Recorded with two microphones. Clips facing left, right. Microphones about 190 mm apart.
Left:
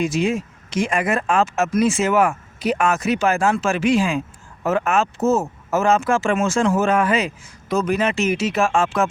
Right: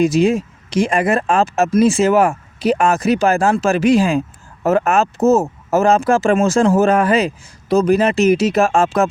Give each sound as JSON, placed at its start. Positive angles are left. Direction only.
{"t": 0.0, "sound": "speech", "side_deg": -35}